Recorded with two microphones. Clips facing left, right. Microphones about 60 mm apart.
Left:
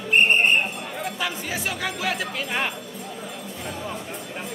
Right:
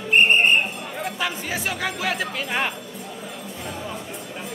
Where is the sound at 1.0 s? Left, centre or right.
Right.